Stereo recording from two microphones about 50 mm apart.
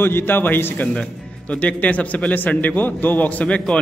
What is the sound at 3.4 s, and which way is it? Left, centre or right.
Speech, left.